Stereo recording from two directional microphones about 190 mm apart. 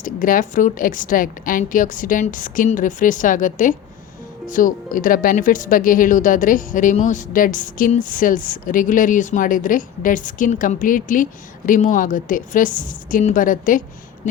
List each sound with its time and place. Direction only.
0.0 s speech: 45° left (ahead or behind)